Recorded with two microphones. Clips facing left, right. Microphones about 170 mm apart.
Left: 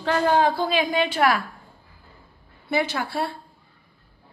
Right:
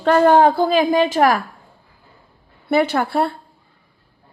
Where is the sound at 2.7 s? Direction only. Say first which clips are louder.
Right 8 dB; 55° right (ahead or behind).